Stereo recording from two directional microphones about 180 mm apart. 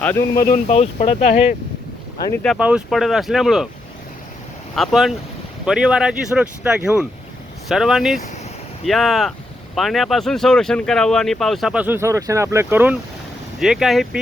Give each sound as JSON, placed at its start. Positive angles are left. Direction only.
{"t": 0.0, "sound": "speech", "side_deg": 10}
{"t": 0.3, "sound": "speech", "side_deg": 50}
{"t": 0.7, "sound": "speech", "side_deg": 35}
{"t": 2.4, "sound": "speech", "side_deg": 0}
{"t": 4.7, "sound": "speech", "side_deg": 0}